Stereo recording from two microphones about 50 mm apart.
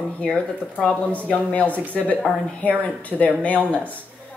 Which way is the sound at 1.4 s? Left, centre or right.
Left.